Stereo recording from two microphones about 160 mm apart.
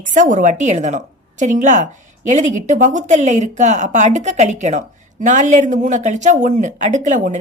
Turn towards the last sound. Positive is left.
turn(degrees=-50)  # may be behind; listen again after turning